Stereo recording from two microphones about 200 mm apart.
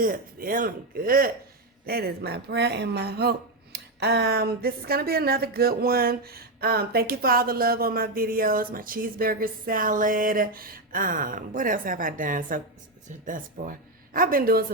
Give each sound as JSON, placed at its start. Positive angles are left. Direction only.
{"t": 0.0, "sound": "speech", "side_deg": -45}